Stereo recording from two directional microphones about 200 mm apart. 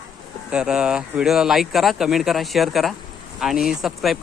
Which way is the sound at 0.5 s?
5° right (ahead or behind).